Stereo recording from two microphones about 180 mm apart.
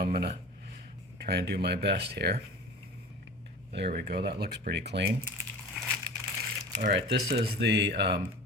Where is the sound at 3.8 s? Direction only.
65° right (ahead or behind).